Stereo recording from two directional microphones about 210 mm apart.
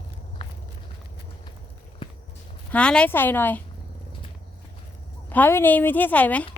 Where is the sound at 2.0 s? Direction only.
25° left (ahead or behind).